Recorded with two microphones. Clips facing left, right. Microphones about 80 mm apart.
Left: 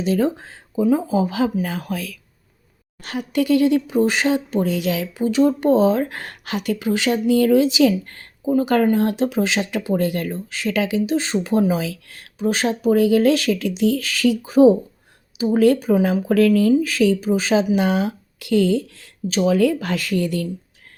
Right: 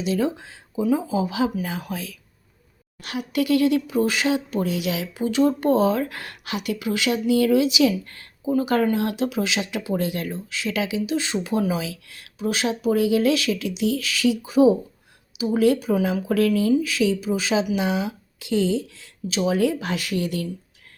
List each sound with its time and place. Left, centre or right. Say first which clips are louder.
0.0 s speech: left 4 dB; left
3.0 s speech: left 3 dB; left